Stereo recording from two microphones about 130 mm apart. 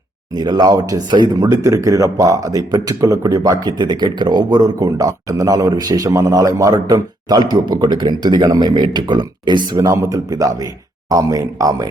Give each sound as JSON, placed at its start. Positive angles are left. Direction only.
{"t": 0.3, "sound": "a man's voice", "side_deg": -35}